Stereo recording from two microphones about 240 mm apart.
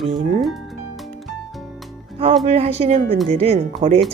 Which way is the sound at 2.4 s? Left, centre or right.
Right.